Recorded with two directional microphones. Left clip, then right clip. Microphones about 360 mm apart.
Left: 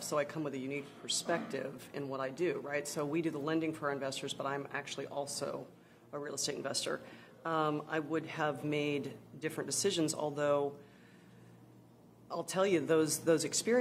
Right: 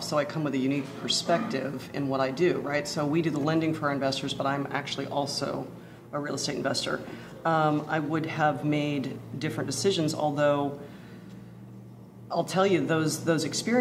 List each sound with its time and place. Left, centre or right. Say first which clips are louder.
0.1 s speech: right 7 dB; left
12.3 s speech: right 8 dB; left